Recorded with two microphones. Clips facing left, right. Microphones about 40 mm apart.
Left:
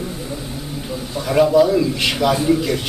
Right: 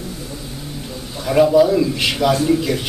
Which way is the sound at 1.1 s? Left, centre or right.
Centre.